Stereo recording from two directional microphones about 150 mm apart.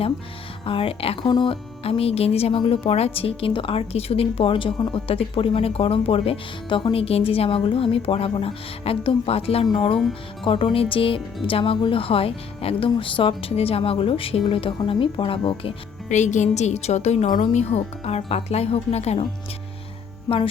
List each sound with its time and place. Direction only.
0.6 s speech: 35° left (ahead or behind)
16.0 s a woman's voice: 50° left (ahead or behind)